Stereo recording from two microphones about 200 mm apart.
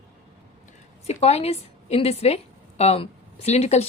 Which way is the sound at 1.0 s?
30° left (ahead or behind).